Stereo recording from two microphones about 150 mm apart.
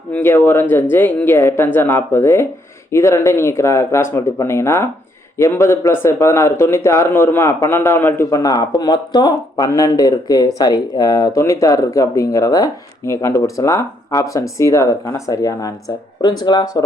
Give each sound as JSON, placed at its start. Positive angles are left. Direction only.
{"t": 0.1, "sound": "a man's voice", "side_deg": 15}